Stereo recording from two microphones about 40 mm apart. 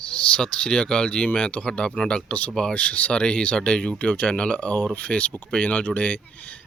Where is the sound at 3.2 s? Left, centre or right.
Left.